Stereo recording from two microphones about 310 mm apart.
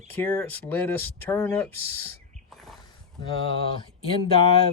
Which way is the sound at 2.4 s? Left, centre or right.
Centre.